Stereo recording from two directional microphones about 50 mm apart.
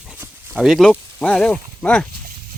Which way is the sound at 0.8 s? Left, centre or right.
Centre.